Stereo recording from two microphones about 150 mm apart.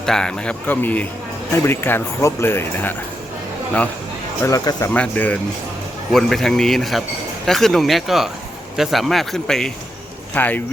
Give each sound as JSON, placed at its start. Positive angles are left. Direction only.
{"t": 0.0, "sound": "speech", "side_deg": 5}
{"t": 4.4, "sound": "speech", "side_deg": 20}
{"t": 4.9, "sound": "a man's voice", "side_deg": 10}